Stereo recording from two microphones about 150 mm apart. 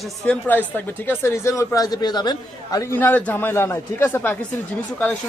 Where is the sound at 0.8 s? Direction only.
15° left (ahead or behind).